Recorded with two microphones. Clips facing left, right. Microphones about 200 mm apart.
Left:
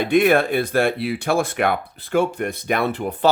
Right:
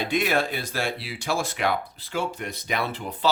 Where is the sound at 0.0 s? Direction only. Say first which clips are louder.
Left 8 dB; 55° left (ahead or behind).